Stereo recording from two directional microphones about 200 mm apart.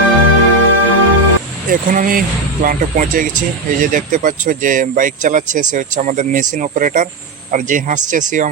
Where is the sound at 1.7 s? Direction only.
45° right (ahead or behind).